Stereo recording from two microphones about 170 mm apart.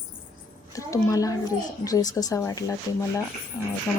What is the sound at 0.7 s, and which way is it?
Speech, 20° left (ahead or behind).